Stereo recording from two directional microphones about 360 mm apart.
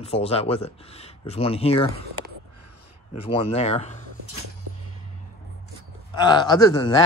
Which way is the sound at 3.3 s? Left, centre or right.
Centre.